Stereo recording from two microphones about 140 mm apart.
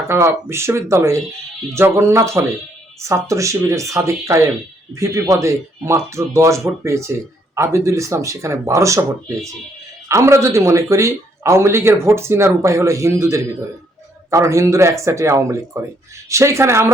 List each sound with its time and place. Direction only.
0.1 s speech: 20° right (ahead or behind)
10.1 s speech: 20° right (ahead or behind)